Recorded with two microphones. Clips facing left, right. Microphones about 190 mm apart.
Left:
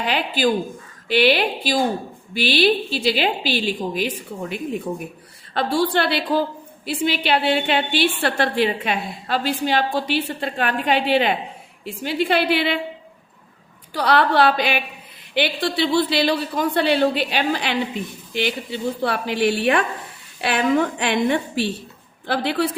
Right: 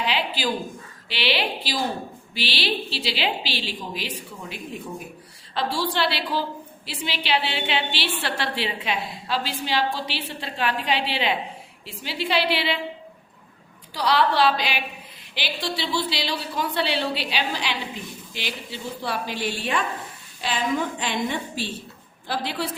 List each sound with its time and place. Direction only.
0.0 s a woman's voice: 50° left (ahead or behind)
13.9 s a woman's voice: 55° left (ahead or behind)